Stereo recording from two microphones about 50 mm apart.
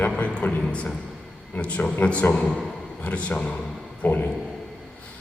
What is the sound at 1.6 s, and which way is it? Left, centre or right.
A man's voice, left.